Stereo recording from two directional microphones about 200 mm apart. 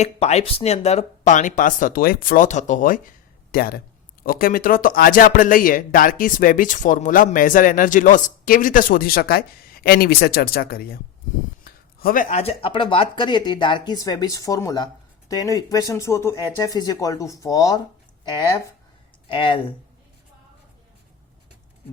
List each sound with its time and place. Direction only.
0.0 s speech: 35° left (ahead or behind); by 17.7 s 20° left (ahead or behind)
19.3 s speech: 25° left (ahead or behind)